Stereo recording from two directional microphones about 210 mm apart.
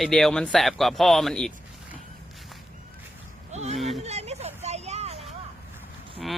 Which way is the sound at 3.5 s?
30° right (ahead or behind).